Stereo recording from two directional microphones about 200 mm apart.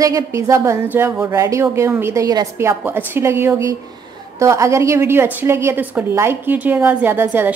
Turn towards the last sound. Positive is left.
turn(degrees=-10)  # may be behind; listen again after turning